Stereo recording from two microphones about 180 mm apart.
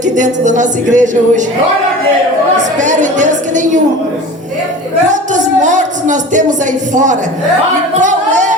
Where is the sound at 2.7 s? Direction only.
45° right (ahead or behind).